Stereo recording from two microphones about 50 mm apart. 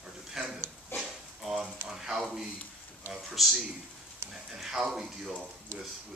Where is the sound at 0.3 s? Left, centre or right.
Centre.